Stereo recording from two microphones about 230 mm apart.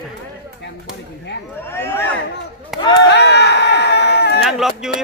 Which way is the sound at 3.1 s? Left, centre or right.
Left.